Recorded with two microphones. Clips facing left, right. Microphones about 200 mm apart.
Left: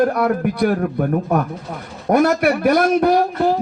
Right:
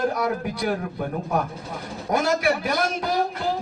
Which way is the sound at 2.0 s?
60° left (ahead or behind).